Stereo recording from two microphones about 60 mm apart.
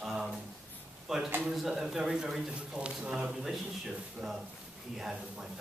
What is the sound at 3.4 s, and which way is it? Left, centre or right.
Speech, centre.